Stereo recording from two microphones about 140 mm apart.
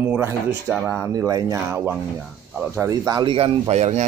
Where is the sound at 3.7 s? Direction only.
50° right (ahead or behind).